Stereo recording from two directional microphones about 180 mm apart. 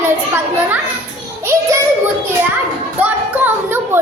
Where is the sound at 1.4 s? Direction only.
15° right (ahead or behind).